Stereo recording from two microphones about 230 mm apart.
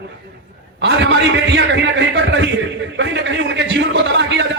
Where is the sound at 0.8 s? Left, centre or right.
Right.